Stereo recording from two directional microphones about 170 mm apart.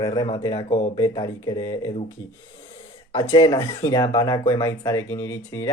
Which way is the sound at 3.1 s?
20° left (ahead or behind).